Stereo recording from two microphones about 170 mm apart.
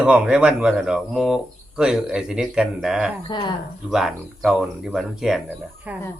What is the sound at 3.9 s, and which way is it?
A man's voice, centre (ahead or behind).